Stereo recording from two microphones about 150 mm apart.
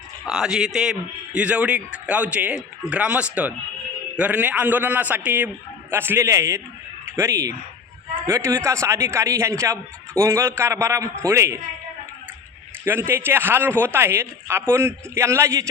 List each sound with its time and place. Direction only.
0.3 s a man's voice: 5° right (ahead or behind)
12.8 s a man's voice: 15° right (ahead or behind)